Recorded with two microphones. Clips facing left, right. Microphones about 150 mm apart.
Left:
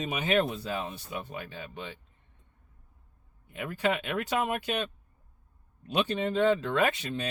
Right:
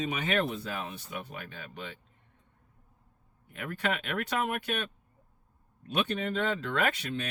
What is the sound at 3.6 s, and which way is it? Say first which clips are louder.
Speech: left 3 dB; 25° left (ahead or behind).